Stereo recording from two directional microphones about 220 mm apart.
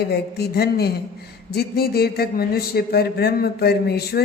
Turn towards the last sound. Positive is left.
turn(degrees=45)  # may be behind; listen again after turning